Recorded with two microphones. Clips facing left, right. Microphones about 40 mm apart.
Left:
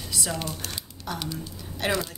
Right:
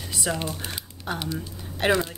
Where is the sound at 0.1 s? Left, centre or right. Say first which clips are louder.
Right 3 dB; right.